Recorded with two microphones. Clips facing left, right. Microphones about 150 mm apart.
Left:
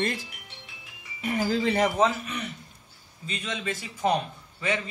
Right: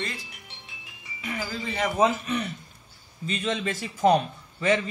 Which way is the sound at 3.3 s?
35° right (ahead or behind).